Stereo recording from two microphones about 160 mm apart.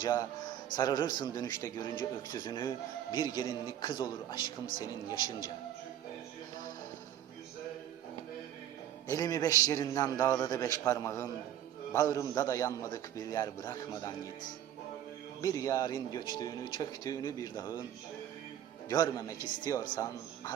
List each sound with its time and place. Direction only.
0.0 s a man's voice: 20° left (ahead or behind)
9.1 s a man's voice: 25° left (ahead or behind)
15.4 s a man's voice: 20° left (ahead or behind)
18.9 s a man's voice: 20° left (ahead or behind)